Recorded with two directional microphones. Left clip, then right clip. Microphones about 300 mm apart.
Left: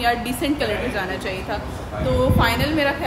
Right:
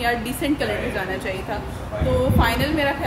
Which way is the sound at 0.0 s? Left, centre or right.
Centre.